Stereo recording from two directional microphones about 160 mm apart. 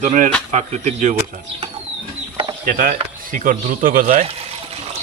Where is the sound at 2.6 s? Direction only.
65° right (ahead or behind).